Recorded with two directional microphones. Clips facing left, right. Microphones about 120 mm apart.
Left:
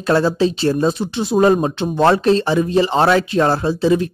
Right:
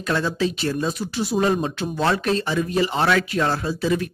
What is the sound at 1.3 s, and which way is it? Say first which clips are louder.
Speech: left 8 dB; 40° left (ahead or behind).